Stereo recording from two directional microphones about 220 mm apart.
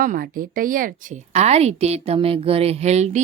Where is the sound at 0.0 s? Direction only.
40° right (ahead or behind).